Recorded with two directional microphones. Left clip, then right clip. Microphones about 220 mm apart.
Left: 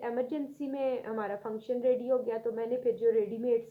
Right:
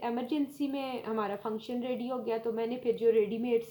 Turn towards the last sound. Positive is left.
turn(degrees=-35)  # may be behind; listen again after turning